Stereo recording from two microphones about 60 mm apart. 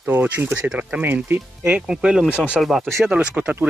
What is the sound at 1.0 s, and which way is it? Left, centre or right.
Speech, right.